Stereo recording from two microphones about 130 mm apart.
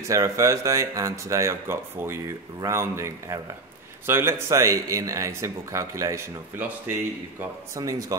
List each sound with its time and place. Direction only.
0.1 s speech: 25° right (ahead or behind)